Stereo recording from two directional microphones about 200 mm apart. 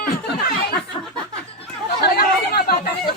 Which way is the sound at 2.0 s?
50° left (ahead or behind).